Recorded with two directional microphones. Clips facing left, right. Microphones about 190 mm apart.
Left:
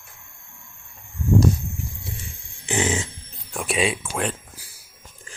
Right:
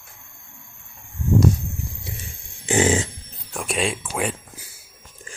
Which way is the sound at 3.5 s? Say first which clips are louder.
Left 1 dB; centre (ahead or behind).